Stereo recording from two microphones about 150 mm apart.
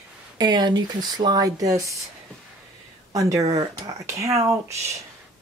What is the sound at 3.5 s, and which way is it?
Speech, 25° right (ahead or behind).